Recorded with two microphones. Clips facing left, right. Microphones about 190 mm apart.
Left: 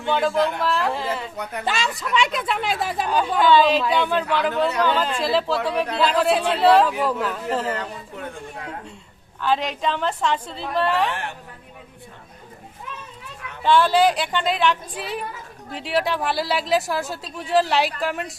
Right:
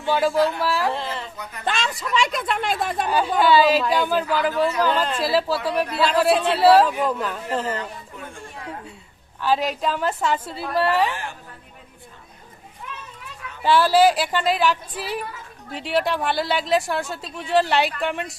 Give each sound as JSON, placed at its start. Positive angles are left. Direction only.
{"t": 0.0, "sound": "speech", "side_deg": -5}
{"t": 9.4, "sound": "a woman's voice", "side_deg": -5}
{"t": 11.1, "sound": "speech", "side_deg": 65}
{"t": 13.6, "sound": "speech", "side_deg": -5}